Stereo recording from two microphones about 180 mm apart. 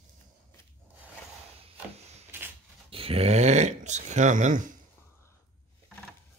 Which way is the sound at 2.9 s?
30° right (ahead or behind).